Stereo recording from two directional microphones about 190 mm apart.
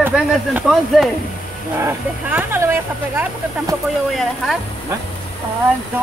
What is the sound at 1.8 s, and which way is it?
Speech, 15° right (ahead or behind).